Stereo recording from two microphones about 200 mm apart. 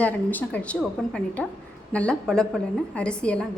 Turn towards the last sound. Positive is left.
turn(degrees=5)  # may be behind; listen again after turning